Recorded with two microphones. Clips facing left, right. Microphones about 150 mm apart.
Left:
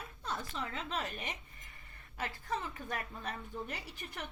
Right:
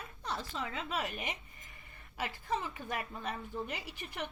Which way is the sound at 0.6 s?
15° right (ahead or behind).